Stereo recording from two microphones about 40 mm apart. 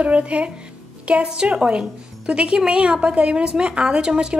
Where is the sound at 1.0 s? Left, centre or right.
Right.